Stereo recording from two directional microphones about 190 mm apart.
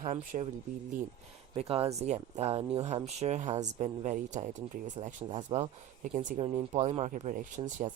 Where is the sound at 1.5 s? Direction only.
30° right (ahead or behind).